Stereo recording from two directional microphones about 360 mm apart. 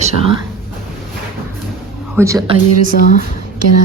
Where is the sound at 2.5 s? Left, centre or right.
Left.